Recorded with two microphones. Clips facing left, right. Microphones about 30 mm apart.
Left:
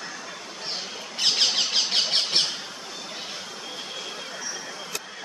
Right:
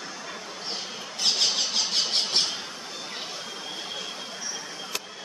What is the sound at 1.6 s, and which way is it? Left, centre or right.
Squeal, left.